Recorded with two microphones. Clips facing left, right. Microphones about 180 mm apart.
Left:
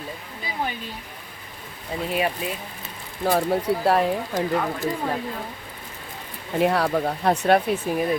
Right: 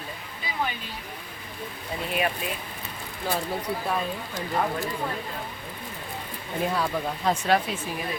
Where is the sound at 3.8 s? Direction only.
80° left.